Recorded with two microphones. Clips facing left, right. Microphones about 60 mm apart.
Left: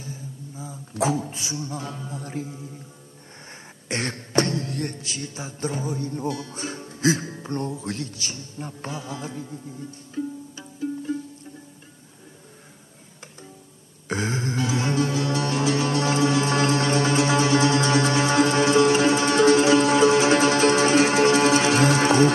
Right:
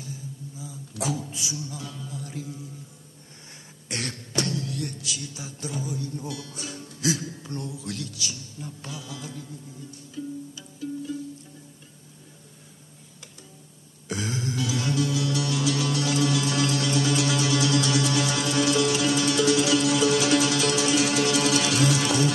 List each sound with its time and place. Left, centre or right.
0.0 s speech: left
3.9 s a sound: left
14.0 s music: left